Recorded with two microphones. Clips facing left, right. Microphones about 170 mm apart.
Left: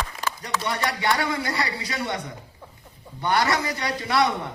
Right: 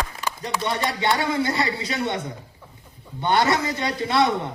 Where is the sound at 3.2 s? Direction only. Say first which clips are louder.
Right 2 dB; 20° right (ahead or behind).